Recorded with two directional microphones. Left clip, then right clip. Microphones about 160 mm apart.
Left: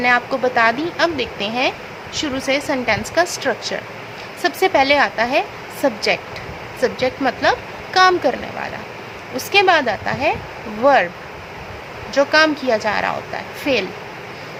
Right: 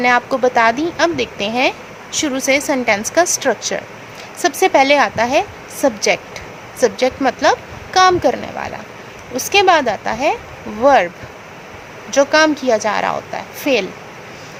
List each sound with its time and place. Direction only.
0.0 s a woman's voice: 40° right (ahead or behind)
12.1 s a woman's voice: 35° right (ahead or behind)